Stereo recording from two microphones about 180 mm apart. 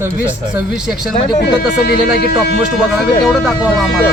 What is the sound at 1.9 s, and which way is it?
Speech, 60° left (ahead or behind).